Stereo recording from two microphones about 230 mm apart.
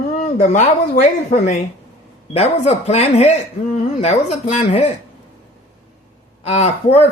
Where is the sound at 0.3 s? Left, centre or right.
Left.